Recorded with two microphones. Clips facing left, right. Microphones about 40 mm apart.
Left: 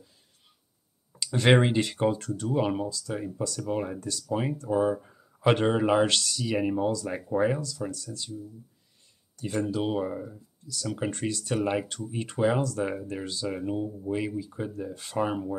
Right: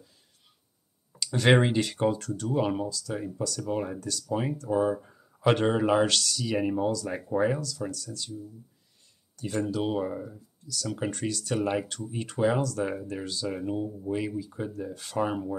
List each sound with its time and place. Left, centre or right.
1.2 s a sound: centre
1.5 s speech: centre
2.1 s speech: centre
2.5 s a man's voice: centre
6.0 s speech: centre
6.4 s speech: centre
7.9 s speech: centre
9.4 s speech: centre
11.1 s speech: left
11.5 s speech: centre
13.0 s speech: centre